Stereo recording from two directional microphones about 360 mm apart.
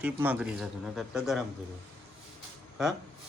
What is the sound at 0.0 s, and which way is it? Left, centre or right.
Speech, centre.